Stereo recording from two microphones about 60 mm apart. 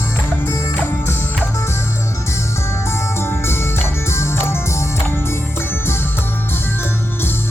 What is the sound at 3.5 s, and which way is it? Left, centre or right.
Music, left.